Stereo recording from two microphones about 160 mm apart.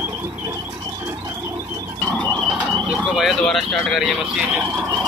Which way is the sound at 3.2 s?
Centre (ahead or behind).